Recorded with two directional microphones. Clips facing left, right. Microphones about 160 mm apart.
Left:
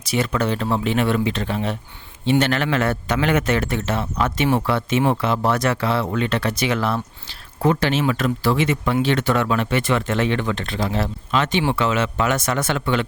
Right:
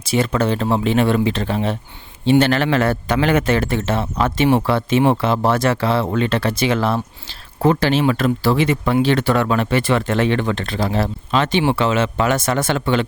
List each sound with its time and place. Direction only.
0.0 s speech: 30° right (ahead or behind)